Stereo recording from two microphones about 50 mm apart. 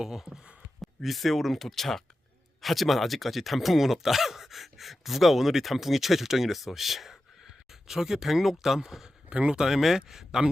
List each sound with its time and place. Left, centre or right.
0.0 s a sound: centre
0.8 s speech: centre
9.3 s speech: right
9.6 s speech: centre